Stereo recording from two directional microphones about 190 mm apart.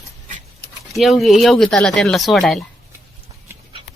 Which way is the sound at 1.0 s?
Centre (ahead or behind).